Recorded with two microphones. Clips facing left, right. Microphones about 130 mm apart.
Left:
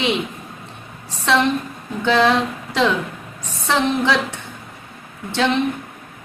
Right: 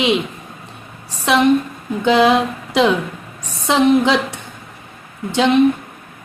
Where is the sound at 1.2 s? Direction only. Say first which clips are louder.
Right 4 dB; 15° right (ahead or behind).